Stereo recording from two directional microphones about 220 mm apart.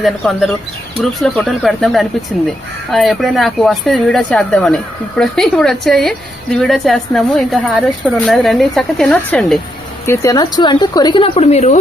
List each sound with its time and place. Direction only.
0.0 s speech: centre (ahead or behind)
10.1 s a woman's voice: 15° left (ahead or behind)